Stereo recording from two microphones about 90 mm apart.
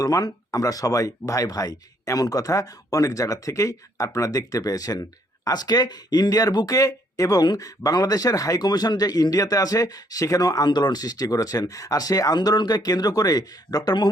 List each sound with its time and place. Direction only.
0.0 s speech: 45° left (ahead or behind)